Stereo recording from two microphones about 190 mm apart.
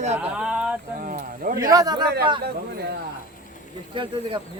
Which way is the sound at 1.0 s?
45° right (ahead or behind).